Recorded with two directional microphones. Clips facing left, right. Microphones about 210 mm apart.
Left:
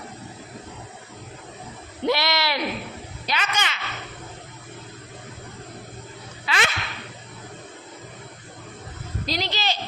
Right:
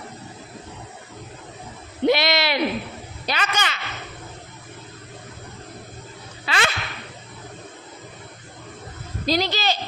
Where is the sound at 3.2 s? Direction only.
40° right (ahead or behind).